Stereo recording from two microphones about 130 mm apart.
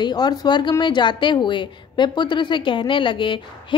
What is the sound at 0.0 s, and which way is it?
A woman's voice, 30° left (ahead or behind).